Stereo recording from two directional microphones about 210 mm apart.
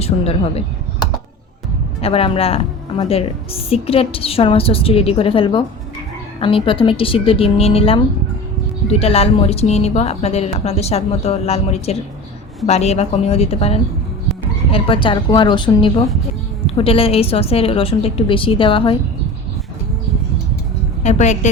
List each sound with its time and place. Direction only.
0.0 s speech: 30° left (ahead or behind)
2.0 s speech: 30° left (ahead or behind)
21.0 s a woman's voice: 35° left (ahead or behind)